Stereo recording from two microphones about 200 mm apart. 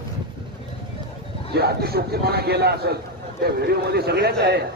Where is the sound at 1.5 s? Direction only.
50° right (ahead or behind).